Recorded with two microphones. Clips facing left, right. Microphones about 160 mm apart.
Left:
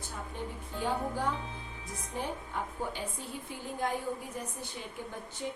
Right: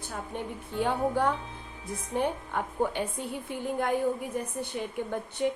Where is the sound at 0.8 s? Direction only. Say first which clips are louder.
Right 6 dB; 65° right (ahead or behind).